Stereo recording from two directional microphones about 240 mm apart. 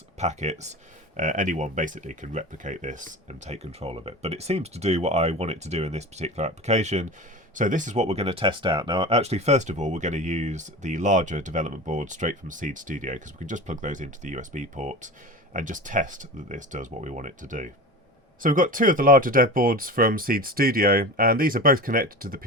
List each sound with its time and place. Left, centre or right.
0.2 s speech: right